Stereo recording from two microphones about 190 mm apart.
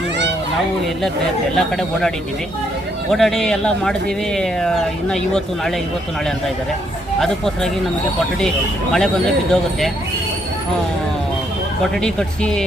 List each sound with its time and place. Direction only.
1.5 s speech: centre (ahead or behind)
7.2 s speech: centre (ahead or behind)
11.8 s speech: 5° left (ahead or behind)